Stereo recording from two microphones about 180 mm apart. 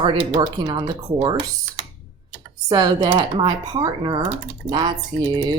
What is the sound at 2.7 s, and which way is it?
Speech, 25° right (ahead or behind).